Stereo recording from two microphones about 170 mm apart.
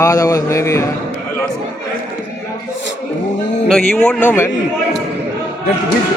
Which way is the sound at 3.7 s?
5° left (ahead or behind).